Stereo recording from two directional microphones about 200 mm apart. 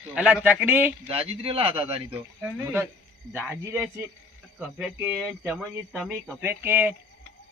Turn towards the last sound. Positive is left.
turn(degrees=-10)  # may be behind; listen again after turning